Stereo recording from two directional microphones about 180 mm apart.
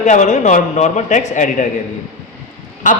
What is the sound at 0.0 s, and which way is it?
Speech, 40° left (ahead or behind).